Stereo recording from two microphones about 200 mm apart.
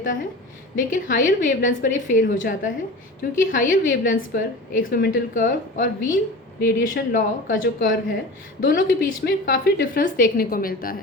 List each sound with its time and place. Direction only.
0.8 s a woman's voice: 40° left (ahead or behind)